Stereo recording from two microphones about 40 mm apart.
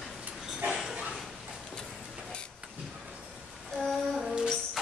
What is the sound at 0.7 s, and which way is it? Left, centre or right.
Dog, centre.